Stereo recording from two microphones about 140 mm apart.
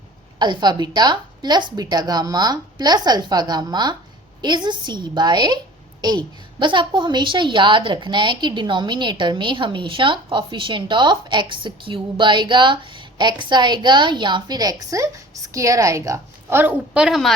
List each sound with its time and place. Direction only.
0.3 s a woman's voice: 30° right (ahead or behind); by 17.3 s centre (ahead or behind)